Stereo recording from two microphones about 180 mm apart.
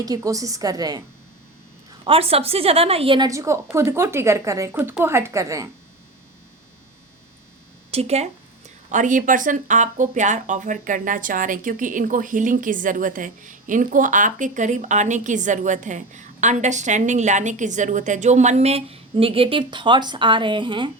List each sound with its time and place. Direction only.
0.0 s a woman's voice: 20° right (ahead or behind)
2.0 s a woman's voice: 30° right (ahead or behind)
3.2 s a woman's voice: 15° right (ahead or behind)
7.9 s speech: 35° right (ahead or behind)